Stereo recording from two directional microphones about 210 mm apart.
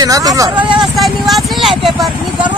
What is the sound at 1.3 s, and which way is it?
Speech, centre (ahead or behind).